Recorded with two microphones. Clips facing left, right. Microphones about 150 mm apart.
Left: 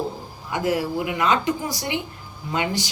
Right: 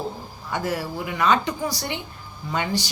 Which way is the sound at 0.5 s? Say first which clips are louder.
Left 4 dB; 15° left (ahead or behind).